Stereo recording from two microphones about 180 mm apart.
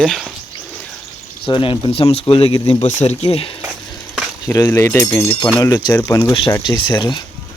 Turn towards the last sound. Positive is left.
turn(degrees=25)  # may be behind; listen again after turning